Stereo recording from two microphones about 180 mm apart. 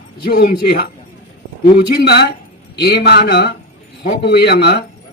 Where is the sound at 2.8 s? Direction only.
65° left (ahead or behind).